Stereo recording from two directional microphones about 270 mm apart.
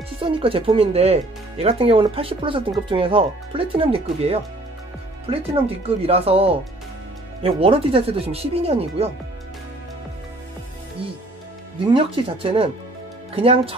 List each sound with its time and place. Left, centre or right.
0.2 s speech: centre
11.9 s speech: centre